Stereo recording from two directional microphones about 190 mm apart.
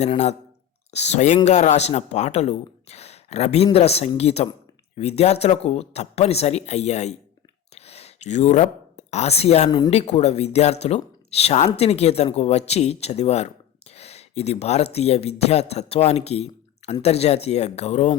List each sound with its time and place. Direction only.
0.0 s speech: 35° left (ahead or behind)
7.8 s a sound: 35° left (ahead or behind)
9.6 s speech: 20° left (ahead or behind)
9.9 s speech: 35° left (ahead or behind)